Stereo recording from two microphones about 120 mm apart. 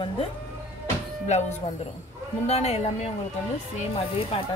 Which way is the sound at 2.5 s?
60° left (ahead or behind).